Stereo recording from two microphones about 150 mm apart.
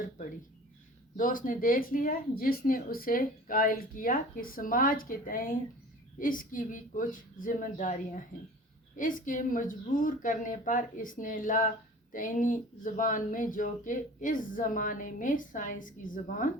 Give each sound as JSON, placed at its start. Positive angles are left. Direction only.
{"t": 1.1, "sound": "speech", "side_deg": 65}
{"t": 9.0, "sound": "speech", "side_deg": 65}